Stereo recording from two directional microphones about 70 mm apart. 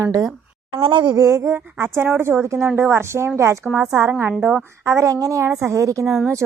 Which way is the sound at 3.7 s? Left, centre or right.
Centre.